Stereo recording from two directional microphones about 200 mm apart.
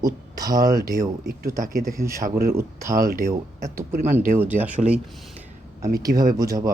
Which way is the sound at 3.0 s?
45° right (ahead or behind).